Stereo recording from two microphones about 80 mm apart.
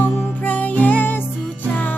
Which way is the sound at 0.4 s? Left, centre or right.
Centre.